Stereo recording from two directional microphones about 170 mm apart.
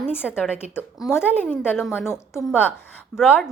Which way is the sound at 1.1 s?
10° left (ahead or behind).